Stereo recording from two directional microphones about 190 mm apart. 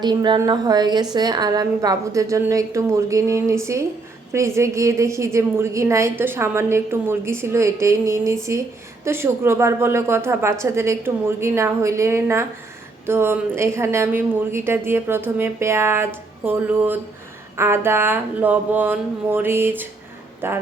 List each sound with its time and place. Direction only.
0.0 s a woman's voice: 25° right (ahead or behind)